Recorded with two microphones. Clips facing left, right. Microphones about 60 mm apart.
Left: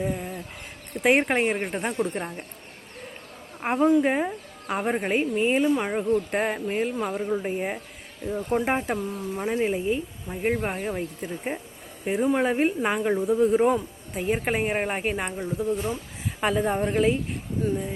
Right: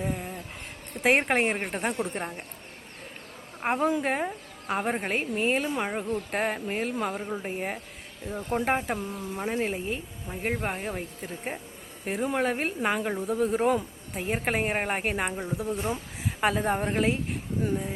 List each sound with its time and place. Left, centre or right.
0.0 s a sound: centre
1.0 s speech: centre
3.6 s speech: centre
15.7 s speech: right
16.4 s speech: centre